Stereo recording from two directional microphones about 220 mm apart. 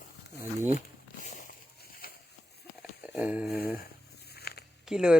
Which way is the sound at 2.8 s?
5° right (ahead or behind).